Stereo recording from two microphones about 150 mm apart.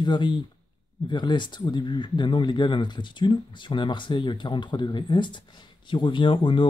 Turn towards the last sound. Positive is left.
turn(degrees=35)  # may be behind; listen again after turning